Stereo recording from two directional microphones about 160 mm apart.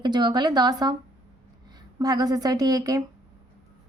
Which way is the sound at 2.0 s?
25° right (ahead or behind).